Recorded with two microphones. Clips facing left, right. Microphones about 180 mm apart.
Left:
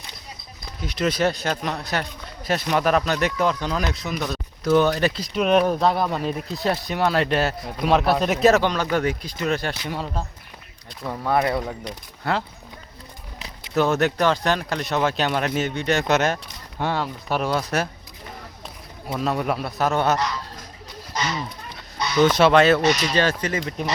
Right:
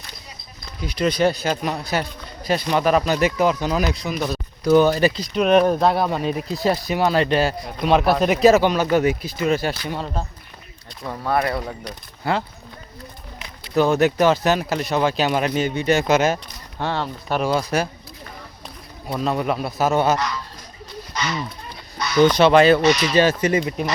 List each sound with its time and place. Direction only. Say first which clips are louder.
0.8 s speech: right 3 dB; centre (ahead or behind)
11.3 s speech: even; 20° left (ahead or behind)
11.5 s speech: left 1 dB; centre (ahead or behind)
13.7 s speech: right 3 dB; centre (ahead or behind)
16.8 s speech: even; 10° left (ahead or behind)
19.3 s speech: right 2 dB; centre (ahead or behind)
21.1 s a sound: even; 40° left (ahead or behind)
21.9 s a sound: right 2 dB; 25° left (ahead or behind)
22.2 s speech: right 2 dB; 5° left (ahead or behind)
22.9 s speech: right 3 dB; 40° left (ahead or behind)
23.1 s speech: right 5 dB; 10° right (ahead or behind)